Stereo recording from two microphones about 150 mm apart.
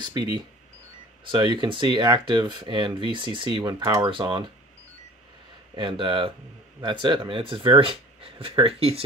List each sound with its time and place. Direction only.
0.0 s speech: 30° right (ahead or behind)
5.8 s speech: 35° right (ahead or behind)